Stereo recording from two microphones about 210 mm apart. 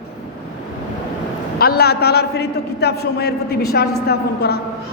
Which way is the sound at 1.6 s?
50° left (ahead or behind).